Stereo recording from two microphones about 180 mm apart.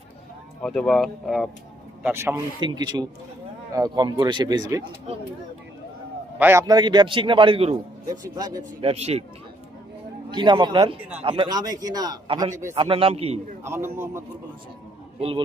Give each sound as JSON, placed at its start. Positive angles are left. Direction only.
{"t": 0.6, "sound": "speech", "side_deg": 5}
{"t": 2.0, "sound": "a man's voice", "side_deg": -15}
{"t": 6.4, "sound": "a man's voice", "side_deg": -15}
{"t": 8.8, "sound": "a man's voice", "side_deg": -35}
{"t": 10.3, "sound": "a man's voice", "side_deg": -25}
{"t": 13.7, "sound": "a man's voice", "side_deg": -15}